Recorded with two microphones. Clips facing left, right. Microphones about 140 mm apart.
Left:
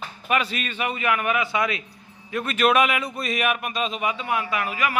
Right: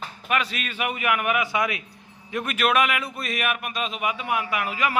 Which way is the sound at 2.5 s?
Centre (ahead or behind).